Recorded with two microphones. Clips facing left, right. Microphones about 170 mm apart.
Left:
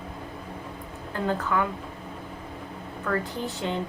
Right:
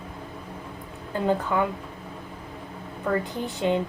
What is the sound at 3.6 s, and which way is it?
Speech, 20° right (ahead or behind).